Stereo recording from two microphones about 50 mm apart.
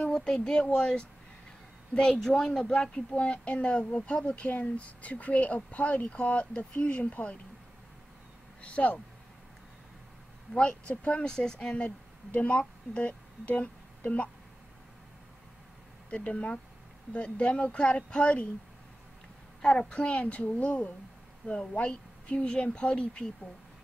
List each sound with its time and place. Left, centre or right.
0.1 s speech: centre
8.5 s speech: left
10.5 s a woman's voice: centre
16.1 s speech: left
19.6 s speech: centre